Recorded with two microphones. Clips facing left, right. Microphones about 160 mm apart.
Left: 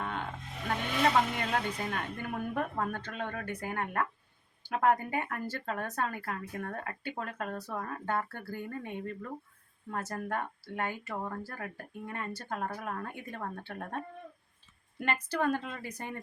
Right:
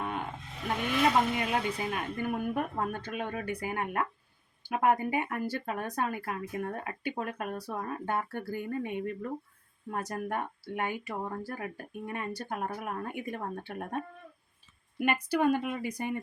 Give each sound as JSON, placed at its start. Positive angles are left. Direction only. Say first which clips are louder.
{"t": 0.0, "sound": "vehicle", "louder": "right 2 dB", "side_deg": -10}
{"t": 1.4, "sound": "speech", "louder": "right 2 dB", "side_deg": -10}